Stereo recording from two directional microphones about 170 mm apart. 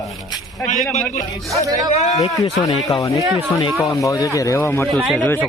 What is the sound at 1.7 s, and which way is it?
Speech, 20° right (ahead or behind).